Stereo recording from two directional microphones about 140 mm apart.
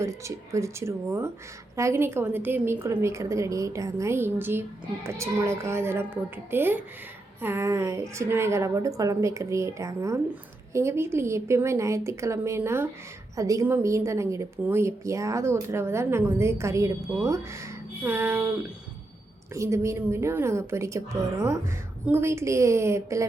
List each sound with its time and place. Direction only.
0.0 s a woman's voice: 20° right (ahead or behind)
19.5 s a woman's voice: 20° right (ahead or behind)